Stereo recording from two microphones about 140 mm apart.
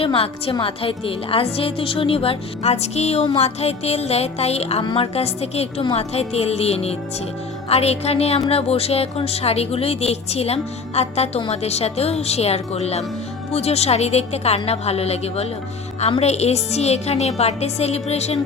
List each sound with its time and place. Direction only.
0.0 s a woman's voice: 40° left (ahead or behind)
4.8 s a woman's voice: 40° left (ahead or behind)